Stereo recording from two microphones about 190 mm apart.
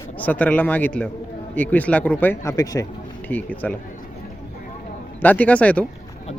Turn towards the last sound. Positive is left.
turn(degrees=5)  # may be behind; listen again after turning